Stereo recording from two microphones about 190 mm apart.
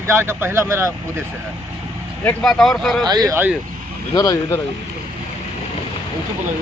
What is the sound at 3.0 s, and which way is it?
Speech, 20° right (ahead or behind).